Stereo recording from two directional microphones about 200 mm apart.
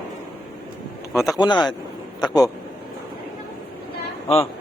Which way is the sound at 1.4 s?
20° left (ahead or behind).